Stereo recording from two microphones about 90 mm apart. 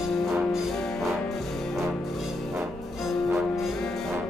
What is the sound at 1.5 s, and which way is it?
Music, centre (ahead or behind).